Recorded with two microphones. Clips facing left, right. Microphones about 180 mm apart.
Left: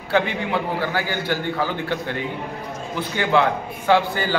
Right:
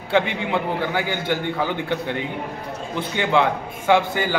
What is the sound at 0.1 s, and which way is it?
A man's voice, 20° right (ahead or behind).